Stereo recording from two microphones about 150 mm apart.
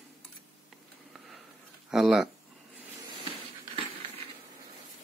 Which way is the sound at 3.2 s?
35° right (ahead or behind).